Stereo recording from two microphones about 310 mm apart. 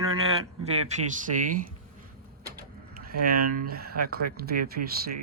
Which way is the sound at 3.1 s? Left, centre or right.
Right.